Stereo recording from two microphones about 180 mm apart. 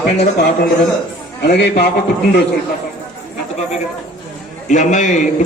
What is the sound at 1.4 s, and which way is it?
Speech, 65° left (ahead or behind).